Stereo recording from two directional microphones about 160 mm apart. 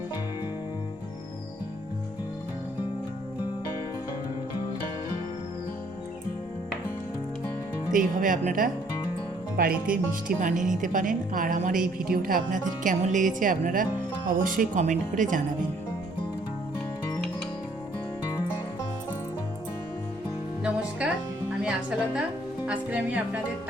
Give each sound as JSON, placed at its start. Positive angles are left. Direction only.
{"t": 7.9, "sound": "a woman's voice", "side_deg": -55}
{"t": 10.2, "sound": "a woman's voice", "side_deg": -55}
{"t": 21.6, "sound": "speech", "side_deg": -5}